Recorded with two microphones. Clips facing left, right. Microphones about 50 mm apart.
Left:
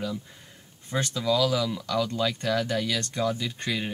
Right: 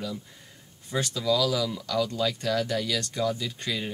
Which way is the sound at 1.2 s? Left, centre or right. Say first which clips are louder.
Left 1 dB; centre.